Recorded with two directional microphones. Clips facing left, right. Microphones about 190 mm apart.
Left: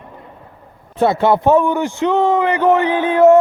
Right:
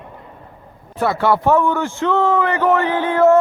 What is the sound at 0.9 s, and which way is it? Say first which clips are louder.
A man's voice: left 3 dB; 20° left (ahead or behind).